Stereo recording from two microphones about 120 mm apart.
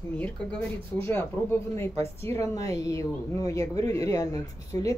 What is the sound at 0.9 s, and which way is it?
A woman's voice, 20° left (ahead or behind).